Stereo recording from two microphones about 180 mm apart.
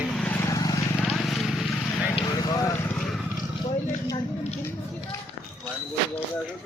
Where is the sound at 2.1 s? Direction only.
20° left (ahead or behind).